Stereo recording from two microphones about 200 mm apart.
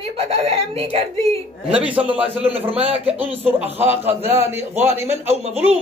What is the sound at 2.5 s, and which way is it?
Speech, 30° right (ahead or behind).